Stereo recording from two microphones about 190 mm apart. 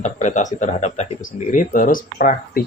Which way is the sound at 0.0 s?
40° left (ahead or behind).